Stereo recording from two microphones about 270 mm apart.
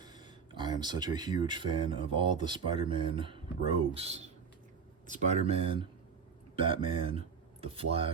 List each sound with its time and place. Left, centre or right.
0.0 s speech: centre